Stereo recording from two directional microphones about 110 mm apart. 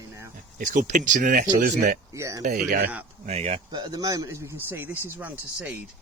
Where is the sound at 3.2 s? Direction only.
75° right (ahead or behind).